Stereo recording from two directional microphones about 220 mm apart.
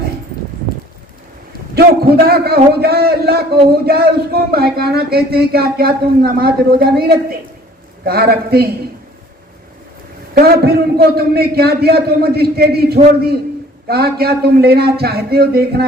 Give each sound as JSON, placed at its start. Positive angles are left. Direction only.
{"t": 1.7, "sound": "a man's voice", "side_deg": -45}
{"t": 10.3, "sound": "a man's voice", "side_deg": -45}